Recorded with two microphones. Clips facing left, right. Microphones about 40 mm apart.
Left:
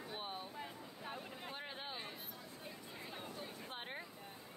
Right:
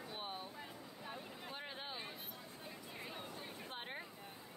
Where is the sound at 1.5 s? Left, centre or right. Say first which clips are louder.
Even; centre.